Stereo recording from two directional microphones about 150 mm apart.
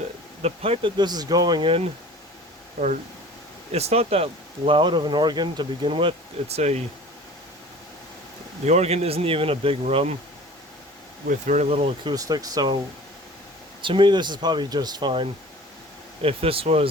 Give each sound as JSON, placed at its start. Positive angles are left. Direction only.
{"t": 0.4, "sound": "speech", "side_deg": -40}
{"t": 2.8, "sound": "speech", "side_deg": -65}
{"t": 3.7, "sound": "speech", "side_deg": -45}
{"t": 6.6, "sound": "speech", "side_deg": -50}
{"t": 8.6, "sound": "speech", "side_deg": -45}
{"t": 11.3, "sound": "speech", "side_deg": -55}
{"t": 12.1, "sound": "speech", "side_deg": -25}
{"t": 13.8, "sound": "speech", "side_deg": -30}